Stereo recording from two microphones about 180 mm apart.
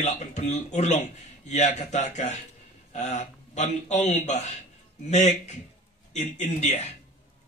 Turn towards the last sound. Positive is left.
turn(degrees=40)  # may be behind; listen again after turning